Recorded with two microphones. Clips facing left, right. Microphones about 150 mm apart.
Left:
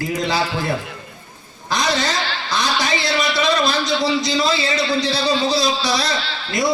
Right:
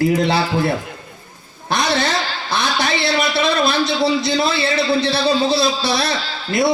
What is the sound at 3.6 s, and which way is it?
A man's voice, 60° right (ahead or behind).